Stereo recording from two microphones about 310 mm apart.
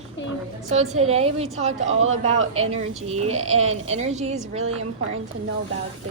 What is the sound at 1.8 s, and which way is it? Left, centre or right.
Speech, right.